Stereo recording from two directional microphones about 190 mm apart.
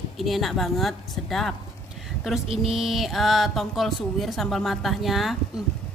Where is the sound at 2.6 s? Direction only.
Centre (ahead or behind).